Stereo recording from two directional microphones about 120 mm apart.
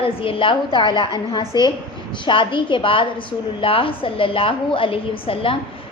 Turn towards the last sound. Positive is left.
turn(degrees=50)  # may be behind; listen again after turning